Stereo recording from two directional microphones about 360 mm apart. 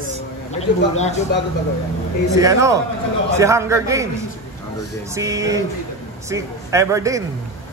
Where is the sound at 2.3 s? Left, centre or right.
Centre.